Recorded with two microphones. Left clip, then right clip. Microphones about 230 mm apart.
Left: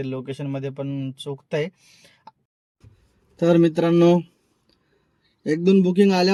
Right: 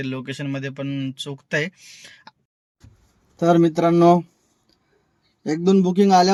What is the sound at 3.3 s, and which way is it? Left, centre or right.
Speech, centre.